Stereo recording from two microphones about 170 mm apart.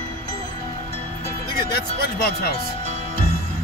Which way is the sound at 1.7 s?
65° left (ahead or behind).